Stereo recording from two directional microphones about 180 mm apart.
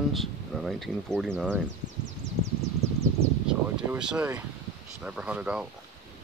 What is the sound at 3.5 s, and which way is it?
Speech, 5° right (ahead or behind).